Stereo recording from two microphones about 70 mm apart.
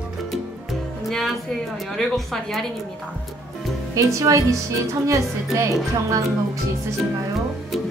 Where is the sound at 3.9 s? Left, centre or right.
Right.